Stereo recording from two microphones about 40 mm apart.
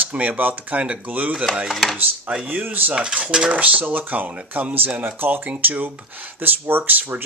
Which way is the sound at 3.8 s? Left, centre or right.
Right.